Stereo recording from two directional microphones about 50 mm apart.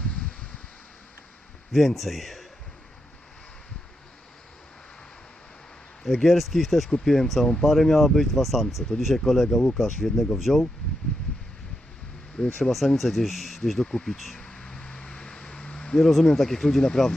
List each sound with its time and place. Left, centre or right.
1.7 s speech: centre
6.2 s speech: centre
12.4 s speech: centre
13.8 s speech: centre
14.2 s speech: centre
14.4 s a sound: centre
16.0 s speech: centre